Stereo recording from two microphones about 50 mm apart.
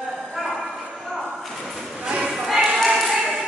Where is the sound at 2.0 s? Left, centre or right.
Right.